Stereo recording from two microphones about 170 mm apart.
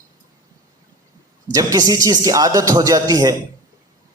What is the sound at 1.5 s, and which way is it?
Speech, 20° right (ahead or behind).